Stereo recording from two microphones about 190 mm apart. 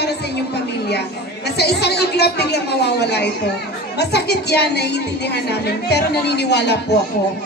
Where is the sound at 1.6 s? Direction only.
60° left (ahead or behind).